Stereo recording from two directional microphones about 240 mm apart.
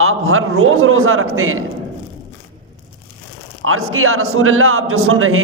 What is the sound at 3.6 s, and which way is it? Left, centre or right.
A man's voice, right.